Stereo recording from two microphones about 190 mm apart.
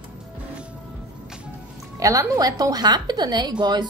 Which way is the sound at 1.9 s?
15° right (ahead or behind).